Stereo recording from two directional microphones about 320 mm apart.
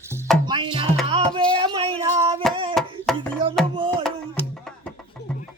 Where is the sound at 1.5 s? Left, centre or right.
Centre.